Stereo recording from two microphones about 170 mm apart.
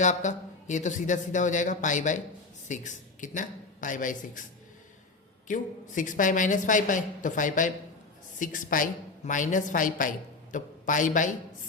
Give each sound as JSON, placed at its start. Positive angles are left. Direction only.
{"t": 0.0, "sound": "a man's voice", "side_deg": 45}
{"t": 5.5, "sound": "a man's voice", "side_deg": 50}